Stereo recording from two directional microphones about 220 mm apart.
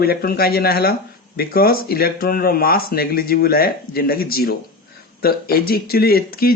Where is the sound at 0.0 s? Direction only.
45° left (ahead or behind).